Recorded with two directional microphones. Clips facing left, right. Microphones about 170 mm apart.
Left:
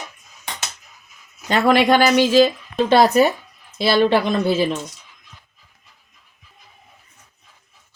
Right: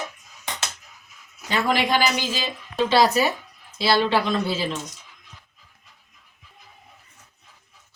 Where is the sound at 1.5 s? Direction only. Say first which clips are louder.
Left 7 dB; 65° left (ahead or behind).